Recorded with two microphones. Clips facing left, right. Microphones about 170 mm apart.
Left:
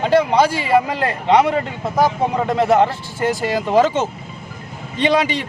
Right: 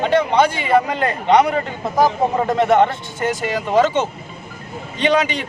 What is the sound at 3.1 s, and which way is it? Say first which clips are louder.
Speech: left 2 dB; 35° left (ahead or behind).